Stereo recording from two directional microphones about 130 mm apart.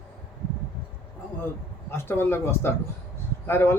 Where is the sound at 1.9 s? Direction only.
15° left (ahead or behind).